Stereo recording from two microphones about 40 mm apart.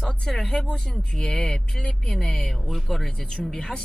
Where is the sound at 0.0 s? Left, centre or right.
Centre.